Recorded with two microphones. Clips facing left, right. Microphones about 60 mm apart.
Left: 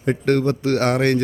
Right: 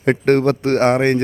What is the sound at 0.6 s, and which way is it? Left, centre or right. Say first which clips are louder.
Speech: right 3 dB; right.